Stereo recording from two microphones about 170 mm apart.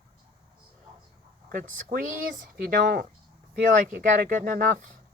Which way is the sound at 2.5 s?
55° right (ahead or behind).